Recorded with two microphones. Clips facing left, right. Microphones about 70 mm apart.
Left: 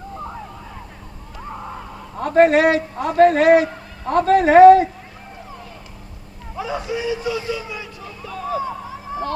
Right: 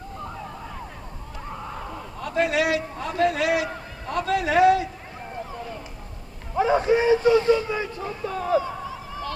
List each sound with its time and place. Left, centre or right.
2.1 s a man's voice: left
6.6 s speech: right